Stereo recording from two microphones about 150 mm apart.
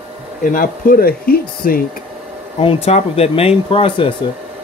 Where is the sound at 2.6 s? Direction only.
40° left (ahead or behind).